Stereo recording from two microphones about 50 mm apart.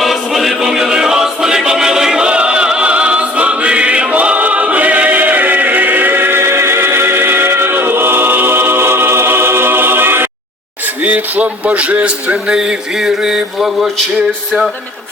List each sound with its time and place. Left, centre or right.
0.0 s music: centre; by 10.2 s right
11.0 s speech: right
12.0 s mantra: right